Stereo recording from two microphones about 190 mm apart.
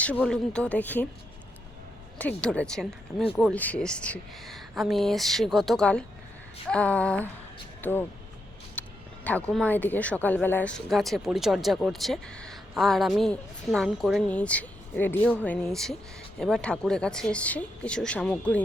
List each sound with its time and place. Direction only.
0.0 s speech: 5° left (ahead or behind)
2.1 s speech: 5° left (ahead or behind)
8.8 s a sound: 10° left (ahead or behind)
9.2 s speech: 5° left (ahead or behind)